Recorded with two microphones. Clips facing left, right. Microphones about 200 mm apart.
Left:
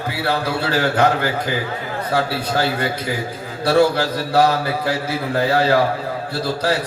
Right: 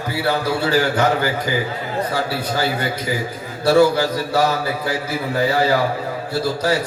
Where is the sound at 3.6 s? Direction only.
60° left (ahead or behind).